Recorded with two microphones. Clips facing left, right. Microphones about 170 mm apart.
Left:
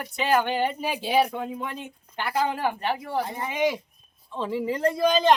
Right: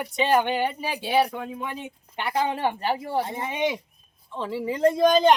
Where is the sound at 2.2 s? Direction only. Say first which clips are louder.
Right 1 dB; 25° right (ahead or behind).